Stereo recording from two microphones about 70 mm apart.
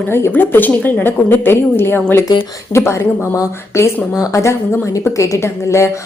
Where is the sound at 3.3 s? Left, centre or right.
Left.